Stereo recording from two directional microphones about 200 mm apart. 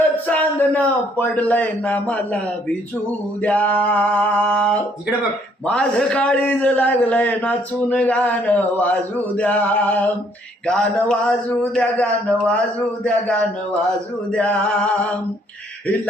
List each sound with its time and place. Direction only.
0.3 s a man's voice: 10° left (ahead or behind)
3.4 s a man's voice: 5° left (ahead or behind)
13.1 s speech: 5° left (ahead or behind)